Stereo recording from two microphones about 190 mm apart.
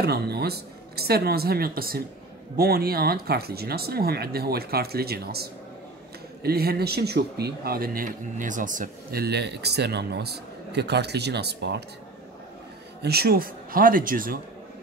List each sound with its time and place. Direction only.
0.0 s a man's voice: 55° right (ahead or behind)
13.0 s speech: 55° right (ahead or behind)